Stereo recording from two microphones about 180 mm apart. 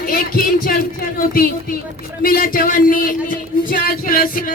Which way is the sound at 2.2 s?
55° left (ahead or behind).